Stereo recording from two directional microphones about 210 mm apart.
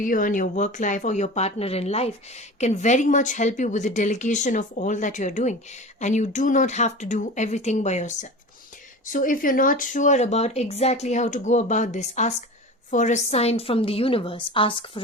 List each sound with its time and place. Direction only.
0.0 s a woman's voice: 40° left (ahead or behind); by 15.0 s 25° left (ahead or behind)